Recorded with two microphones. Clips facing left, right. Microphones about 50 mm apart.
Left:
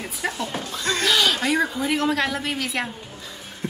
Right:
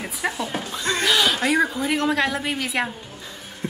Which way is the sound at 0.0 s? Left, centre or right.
Centre.